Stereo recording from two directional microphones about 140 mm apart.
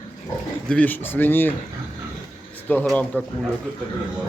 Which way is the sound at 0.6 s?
10° left (ahead or behind).